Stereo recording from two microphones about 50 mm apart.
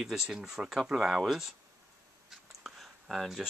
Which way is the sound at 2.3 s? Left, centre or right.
Centre.